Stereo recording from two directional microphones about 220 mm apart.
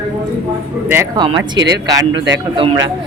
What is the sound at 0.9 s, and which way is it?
Speech, 15° right (ahead or behind).